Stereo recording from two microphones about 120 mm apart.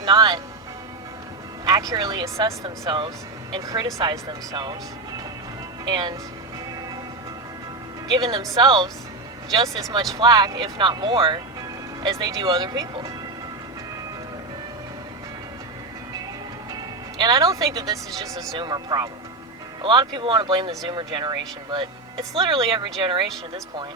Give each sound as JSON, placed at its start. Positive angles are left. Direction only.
{"t": 0.0, "sound": "music", "side_deg": -40}
{"t": 1.6, "sound": "speech", "side_deg": -30}
{"t": 4.3, "sound": "speech", "side_deg": -40}
{"t": 5.8, "sound": "speech", "side_deg": -35}
{"t": 8.1, "sound": "speech", "side_deg": -35}
{"t": 17.2, "sound": "speech", "side_deg": -35}